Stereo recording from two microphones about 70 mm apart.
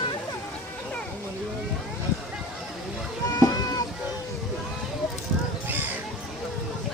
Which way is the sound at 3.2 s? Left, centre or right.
Left.